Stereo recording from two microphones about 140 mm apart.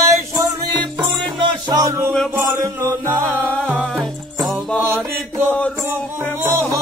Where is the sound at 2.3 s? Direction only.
20° right (ahead or behind).